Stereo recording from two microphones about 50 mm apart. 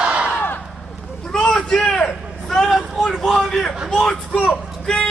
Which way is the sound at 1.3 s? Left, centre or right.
Centre.